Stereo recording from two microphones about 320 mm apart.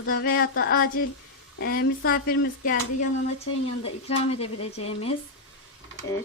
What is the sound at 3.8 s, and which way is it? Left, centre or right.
Speech, centre.